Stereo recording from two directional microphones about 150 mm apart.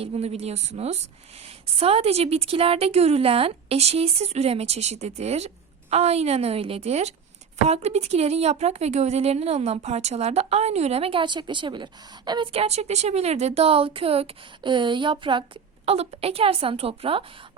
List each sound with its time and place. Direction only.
0.0 s speech: 45° right (ahead or behind)